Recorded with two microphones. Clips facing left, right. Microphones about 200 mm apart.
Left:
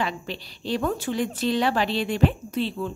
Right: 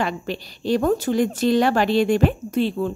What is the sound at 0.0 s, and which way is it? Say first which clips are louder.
A woman's voice: right 4 dB; 45° right (ahead or behind).